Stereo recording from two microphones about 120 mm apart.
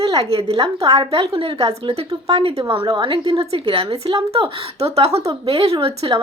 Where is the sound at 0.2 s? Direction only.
55° right (ahead or behind).